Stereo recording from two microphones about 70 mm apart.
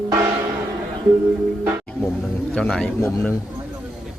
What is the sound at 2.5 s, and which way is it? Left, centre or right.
Bird, centre.